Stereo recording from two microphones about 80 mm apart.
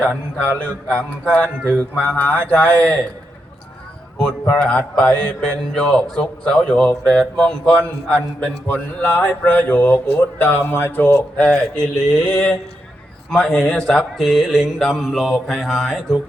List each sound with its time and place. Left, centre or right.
0.0 s a man's voice: centre
4.4 s a man's voice: centre